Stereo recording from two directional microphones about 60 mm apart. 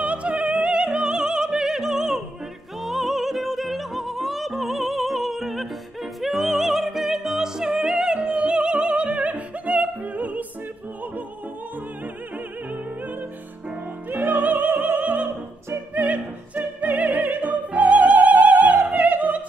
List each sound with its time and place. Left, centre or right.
0.0 s opera: centre
2.8 s music: centre; by 10.4 s right
12.6 s music: right
15.9 s opera: right